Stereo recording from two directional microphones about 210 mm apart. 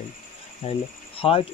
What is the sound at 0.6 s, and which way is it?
Speech, 30° left (ahead or behind).